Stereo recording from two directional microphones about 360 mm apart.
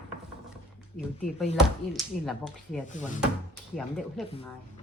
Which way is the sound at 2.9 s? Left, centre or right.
Left.